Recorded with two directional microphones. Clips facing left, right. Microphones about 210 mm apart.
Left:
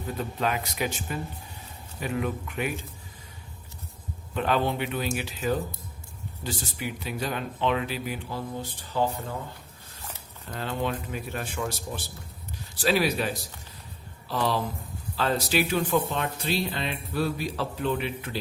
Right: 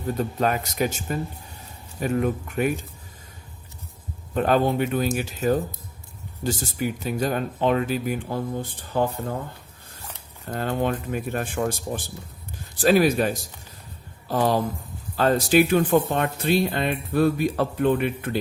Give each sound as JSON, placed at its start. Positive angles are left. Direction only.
{"t": 0.2, "sound": "speech", "side_deg": -45}
{"t": 4.4, "sound": "speech", "side_deg": -45}
{"t": 10.5, "sound": "speech", "side_deg": -50}